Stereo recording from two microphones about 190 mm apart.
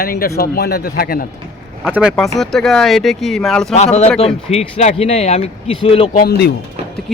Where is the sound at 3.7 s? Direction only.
35° left (ahead or behind).